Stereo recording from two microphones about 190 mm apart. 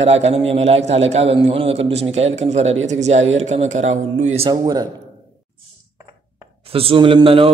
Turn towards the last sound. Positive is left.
turn(degrees=-30)  # may be behind; listen again after turning